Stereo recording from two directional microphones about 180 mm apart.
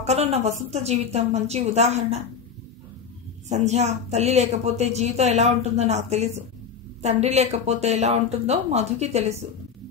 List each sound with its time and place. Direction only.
0.0 s a woman's voice: 35° right (ahead or behind)
3.4 s a woman's voice: 40° right (ahead or behind)